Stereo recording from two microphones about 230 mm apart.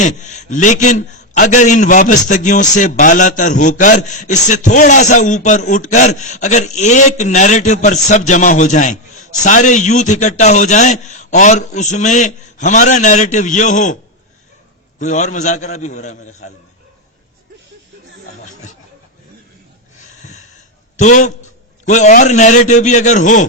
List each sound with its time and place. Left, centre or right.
0.0 s a man's voice: left
14.9 s a man's voice: left
20.0 s a sound: left
20.9 s a man's voice: left